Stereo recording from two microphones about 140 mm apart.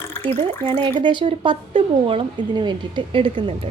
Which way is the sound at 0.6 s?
35° right (ahead or behind).